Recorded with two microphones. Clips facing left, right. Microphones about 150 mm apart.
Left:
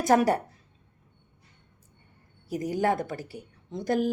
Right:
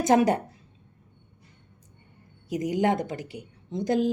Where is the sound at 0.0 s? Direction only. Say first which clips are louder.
Right 1 dB; 20° right (ahead or behind).